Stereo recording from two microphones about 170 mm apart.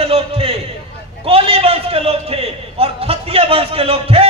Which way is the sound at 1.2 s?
35° right (ahead or behind).